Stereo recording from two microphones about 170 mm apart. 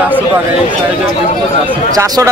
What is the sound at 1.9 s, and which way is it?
Speech, 15° right (ahead or behind).